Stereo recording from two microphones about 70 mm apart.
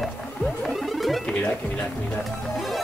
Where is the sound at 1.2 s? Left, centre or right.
Centre.